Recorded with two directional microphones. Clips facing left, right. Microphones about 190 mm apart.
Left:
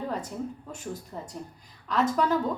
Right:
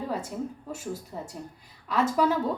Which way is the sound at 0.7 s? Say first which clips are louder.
Right 2 dB; 5° right (ahead or behind).